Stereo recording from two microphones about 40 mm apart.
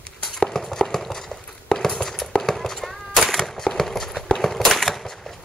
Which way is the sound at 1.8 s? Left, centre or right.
Centre.